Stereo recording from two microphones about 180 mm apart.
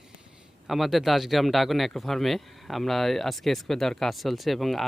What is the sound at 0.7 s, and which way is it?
Speech, centre (ahead or behind).